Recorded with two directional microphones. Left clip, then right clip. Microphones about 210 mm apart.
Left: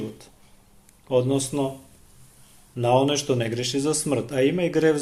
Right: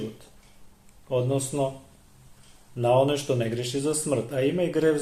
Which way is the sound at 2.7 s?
40° left (ahead or behind).